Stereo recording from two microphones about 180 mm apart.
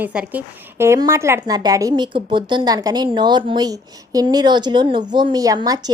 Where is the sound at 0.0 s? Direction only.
10° right (ahead or behind).